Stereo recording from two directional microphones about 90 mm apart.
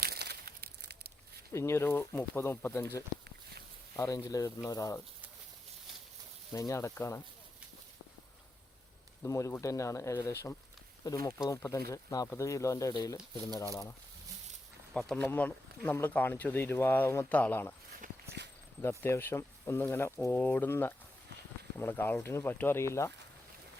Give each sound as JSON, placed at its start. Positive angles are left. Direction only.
{"t": 1.5, "sound": "speech", "side_deg": 30}
{"t": 6.5, "sound": "speech", "side_deg": 35}
{"t": 9.2, "sound": "speech", "side_deg": 35}
{"t": 11.0, "sound": "speech", "side_deg": 40}
{"t": 14.9, "sound": "speech", "side_deg": 5}
{"t": 15.2, "sound": "speech", "side_deg": 20}
{"t": 18.8, "sound": "speech", "side_deg": 30}